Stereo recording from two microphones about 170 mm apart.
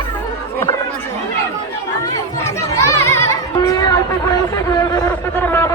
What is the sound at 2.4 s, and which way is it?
Chatter, 20° left (ahead or behind).